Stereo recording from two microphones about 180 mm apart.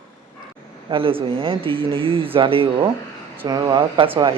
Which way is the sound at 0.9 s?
30° right (ahead or behind).